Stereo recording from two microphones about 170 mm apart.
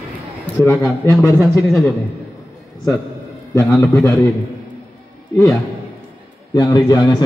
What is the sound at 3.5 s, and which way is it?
Speech, 15° left (ahead or behind).